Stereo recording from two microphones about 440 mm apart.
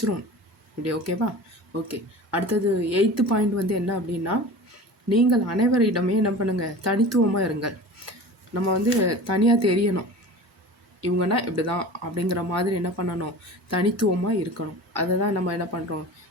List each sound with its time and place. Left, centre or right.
0.8 s speech: right
11.0 s speech: right